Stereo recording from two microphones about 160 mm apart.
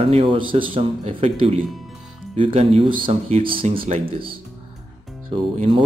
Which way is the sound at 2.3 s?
40° right (ahead or behind).